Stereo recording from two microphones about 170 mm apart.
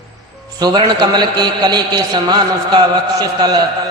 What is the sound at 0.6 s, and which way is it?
A man's voice, 25° right (ahead or behind).